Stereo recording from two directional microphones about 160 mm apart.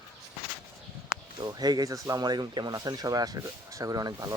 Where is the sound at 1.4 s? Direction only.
25° right (ahead or behind).